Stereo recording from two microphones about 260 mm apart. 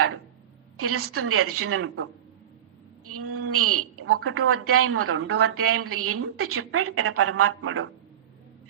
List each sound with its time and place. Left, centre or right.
0.8 s speech: right